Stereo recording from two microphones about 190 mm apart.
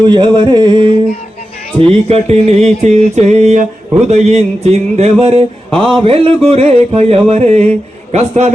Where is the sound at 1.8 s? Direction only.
30° right (ahead or behind).